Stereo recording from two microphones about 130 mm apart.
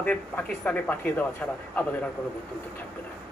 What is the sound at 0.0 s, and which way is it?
Speech, 10° left (ahead or behind).